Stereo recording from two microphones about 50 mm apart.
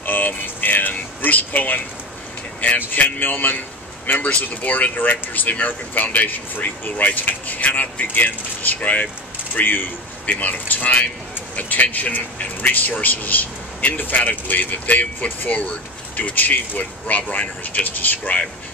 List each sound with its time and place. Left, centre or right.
0.0 s vehicle: left
2.9 s a man's voice: left